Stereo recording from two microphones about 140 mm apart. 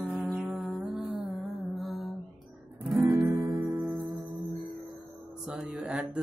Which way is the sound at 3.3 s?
20° right (ahead or behind).